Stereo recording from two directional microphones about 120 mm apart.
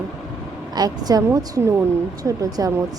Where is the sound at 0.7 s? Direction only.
35° right (ahead or behind).